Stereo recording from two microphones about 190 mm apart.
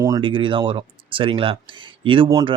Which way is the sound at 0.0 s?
20° right (ahead or behind).